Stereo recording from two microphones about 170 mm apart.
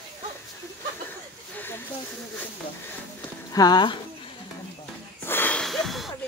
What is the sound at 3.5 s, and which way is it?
Speech, 25° left (ahead or behind).